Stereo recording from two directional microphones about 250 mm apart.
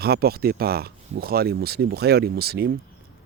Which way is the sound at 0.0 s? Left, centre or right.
Right.